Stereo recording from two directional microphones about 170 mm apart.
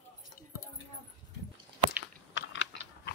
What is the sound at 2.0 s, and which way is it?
Typing, 90° left.